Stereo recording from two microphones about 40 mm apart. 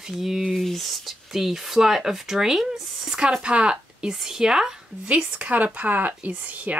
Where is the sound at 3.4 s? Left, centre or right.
Right.